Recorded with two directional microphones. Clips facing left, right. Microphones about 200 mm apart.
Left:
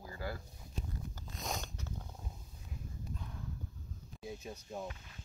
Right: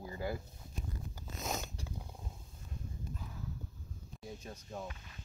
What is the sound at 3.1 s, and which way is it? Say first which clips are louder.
Clip-clop: even; 5° right (ahead or behind).